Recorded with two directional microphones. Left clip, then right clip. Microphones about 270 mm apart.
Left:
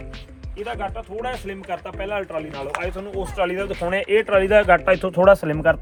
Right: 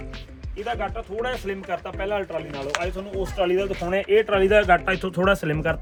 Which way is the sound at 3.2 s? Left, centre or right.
Centre.